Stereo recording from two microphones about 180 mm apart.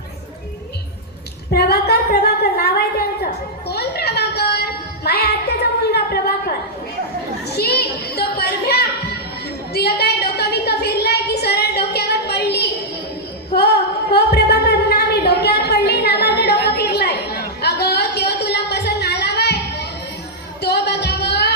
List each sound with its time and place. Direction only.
1.5 s a woman's voice: 65° left (ahead or behind)
3.7 s music: 65° left (ahead or behind)
7.4 s children playing: 65° left (ahead or behind)
9.7 s a sound: 60° left (ahead or behind)
20.6 s music: 65° left (ahead or behind)